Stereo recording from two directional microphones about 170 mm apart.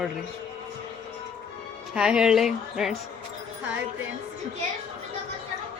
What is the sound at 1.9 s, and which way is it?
Speech, 5° right (ahead or behind).